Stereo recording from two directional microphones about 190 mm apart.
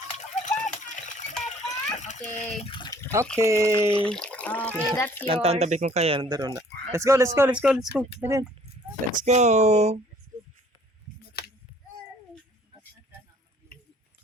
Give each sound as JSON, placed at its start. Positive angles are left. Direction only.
{"t": 0.1, "sound": "a sound", "side_deg": 40}
{"t": 1.7, "sound": "water", "side_deg": 40}
{"t": 3.3, "sound": "speech", "side_deg": -15}
{"t": 3.9, "sound": "speech", "side_deg": 5}
{"t": 5.2, "sound": "speech", "side_deg": -30}
{"t": 8.2, "sound": "speech", "side_deg": -15}
{"t": 9.1, "sound": "speech", "side_deg": -35}
{"t": 11.4, "sound": "a sound", "side_deg": 55}
{"t": 13.7, "sound": "a sound", "side_deg": 50}